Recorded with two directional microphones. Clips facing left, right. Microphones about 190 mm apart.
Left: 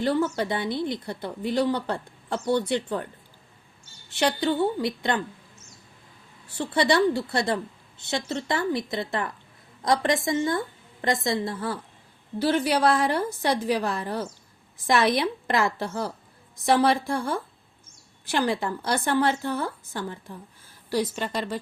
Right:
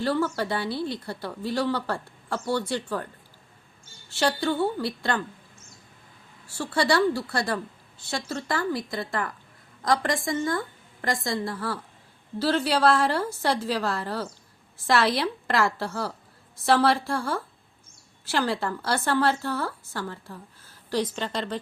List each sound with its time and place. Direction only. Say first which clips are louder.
0.0 s speech: left 1 dB; 20° left (ahead or behind)
4.1 s speech: left 1 dB; 15° left (ahead or behind)
6.5 s a woman's voice: left 1 dB; 20° left (ahead or behind)